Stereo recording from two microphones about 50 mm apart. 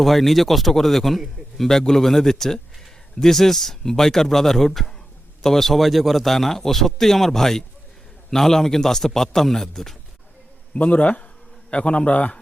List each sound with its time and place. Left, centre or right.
0.0 s a man's voice: centre
10.8 s a man's voice: left